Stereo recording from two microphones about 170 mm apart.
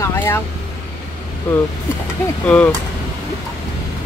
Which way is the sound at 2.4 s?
5° left (ahead or behind).